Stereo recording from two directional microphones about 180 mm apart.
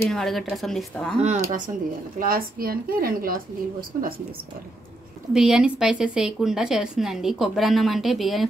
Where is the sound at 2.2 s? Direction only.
55° right (ahead or behind).